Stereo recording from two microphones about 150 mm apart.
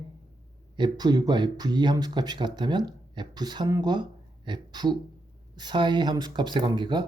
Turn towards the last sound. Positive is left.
turn(degrees=-30)  # may be behind; listen again after turning